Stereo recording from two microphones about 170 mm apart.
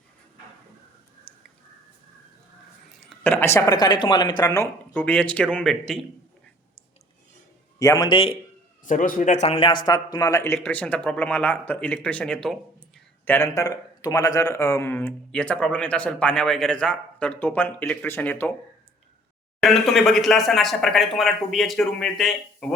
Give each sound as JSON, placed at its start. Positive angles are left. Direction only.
{"t": 3.2, "sound": "speech", "side_deg": 15}
{"t": 7.8, "sound": "speech", "side_deg": 20}
{"t": 8.8, "sound": "a man's voice", "side_deg": 50}
{"t": 19.5, "sound": "speech", "side_deg": 0}